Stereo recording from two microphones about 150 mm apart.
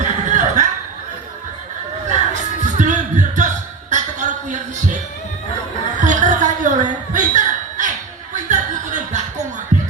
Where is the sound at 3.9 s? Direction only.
55° right (ahead or behind).